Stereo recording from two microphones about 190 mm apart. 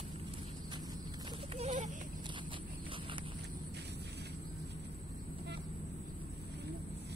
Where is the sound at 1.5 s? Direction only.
40° right (ahead or behind).